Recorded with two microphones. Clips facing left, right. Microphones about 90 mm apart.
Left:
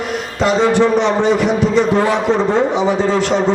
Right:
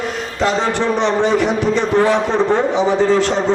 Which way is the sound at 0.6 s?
15° left (ahead or behind).